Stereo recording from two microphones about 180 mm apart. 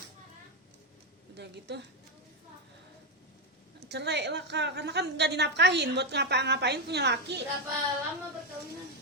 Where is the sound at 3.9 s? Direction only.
70° right (ahead or behind).